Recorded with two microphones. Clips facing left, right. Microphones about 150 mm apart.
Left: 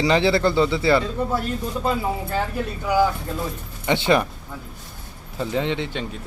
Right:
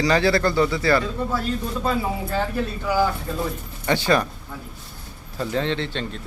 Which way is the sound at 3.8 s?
20° left (ahead or behind).